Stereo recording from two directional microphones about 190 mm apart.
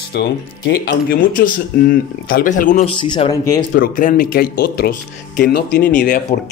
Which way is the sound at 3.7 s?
45° left (ahead or behind).